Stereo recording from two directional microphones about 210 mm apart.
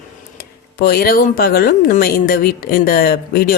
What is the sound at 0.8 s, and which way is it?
A woman's voice, 45° left (ahead or behind).